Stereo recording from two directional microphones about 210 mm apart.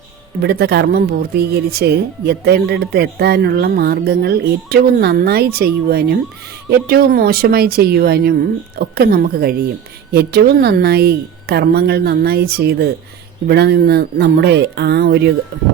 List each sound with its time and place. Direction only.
0.4 s speech: 50° right (ahead or behind)